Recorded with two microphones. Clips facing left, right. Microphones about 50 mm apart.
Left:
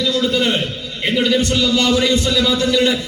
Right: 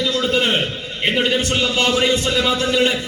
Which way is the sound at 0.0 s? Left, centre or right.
Right.